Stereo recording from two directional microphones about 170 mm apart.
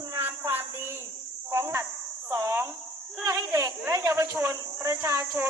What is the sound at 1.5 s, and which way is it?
Speech, 15° right (ahead or behind).